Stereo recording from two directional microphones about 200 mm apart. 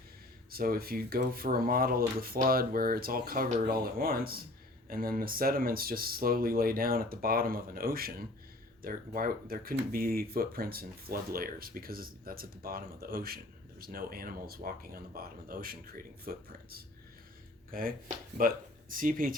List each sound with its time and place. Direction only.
0.5 s speech: 50° right (ahead or behind)